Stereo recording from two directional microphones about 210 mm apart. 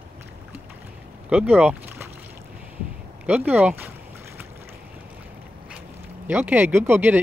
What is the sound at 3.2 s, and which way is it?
Speech, 5° right (ahead or behind).